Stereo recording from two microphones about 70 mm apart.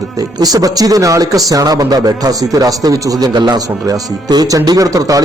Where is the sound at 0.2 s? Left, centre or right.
Right.